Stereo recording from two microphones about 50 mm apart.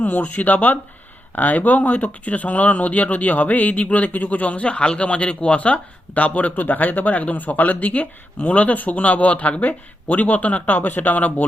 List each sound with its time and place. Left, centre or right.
0.0 s speech: left